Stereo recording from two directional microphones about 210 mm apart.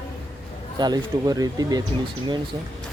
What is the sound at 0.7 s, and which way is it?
Speech, 20° right (ahead or behind).